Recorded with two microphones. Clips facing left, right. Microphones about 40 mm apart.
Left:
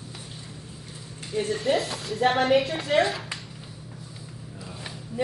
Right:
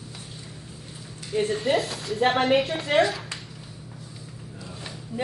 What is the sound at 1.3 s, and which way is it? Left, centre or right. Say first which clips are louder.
Speech: right 1 dB; right.